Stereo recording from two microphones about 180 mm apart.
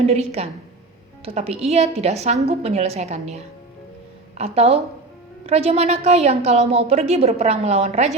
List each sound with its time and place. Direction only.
0.0 s a woman's voice: 35° right (ahead or behind)